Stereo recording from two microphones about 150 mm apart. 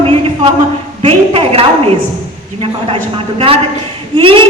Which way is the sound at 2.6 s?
40° right (ahead or behind).